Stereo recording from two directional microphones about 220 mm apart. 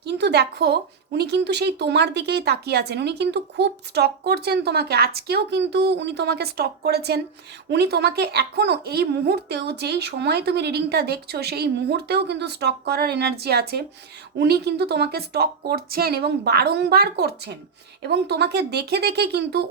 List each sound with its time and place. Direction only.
0.0 s a woman's voice: 50° right (ahead or behind)